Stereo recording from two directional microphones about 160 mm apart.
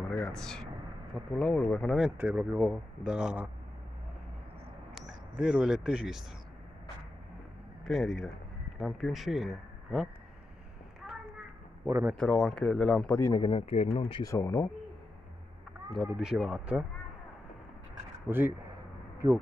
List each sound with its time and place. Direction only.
0.1 s speech: 5° left (ahead or behind)
2.1 s speech: 10° right (ahead or behind)
4.9 s speech: 5° right (ahead or behind)
7.8 s speech: centre (ahead or behind)
11.0 s a sound: 5° right (ahead or behind)
11.8 s speech: 10° right (ahead or behind)
12.2 s speech: 5° left (ahead or behind)
13.2 s speech: 30° left (ahead or behind)
14.2 s speech: 20° left (ahead or behind)
15.9 s speech: 5° right (ahead or behind)
18.3 s speech: 15° right (ahead or behind)